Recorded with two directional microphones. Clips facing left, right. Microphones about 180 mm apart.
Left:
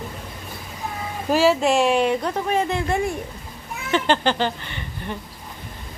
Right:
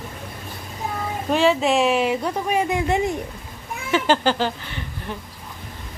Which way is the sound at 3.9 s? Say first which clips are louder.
Right 1 dB; 5° right (ahead or behind).